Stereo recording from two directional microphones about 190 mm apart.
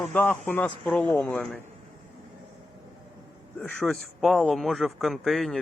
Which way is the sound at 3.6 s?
5° left (ahead or behind).